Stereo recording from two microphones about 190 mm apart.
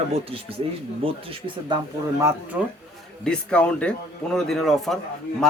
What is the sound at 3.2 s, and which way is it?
A man's voice, 5° left (ahead or behind).